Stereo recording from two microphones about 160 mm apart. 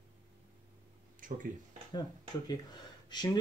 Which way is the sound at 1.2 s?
55° right (ahead or behind).